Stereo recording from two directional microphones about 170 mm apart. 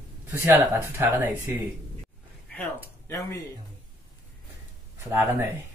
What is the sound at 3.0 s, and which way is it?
Speech, 15° left (ahead or behind).